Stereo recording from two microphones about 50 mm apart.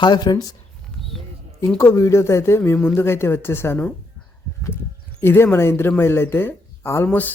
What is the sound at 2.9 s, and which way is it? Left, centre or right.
Speech, left.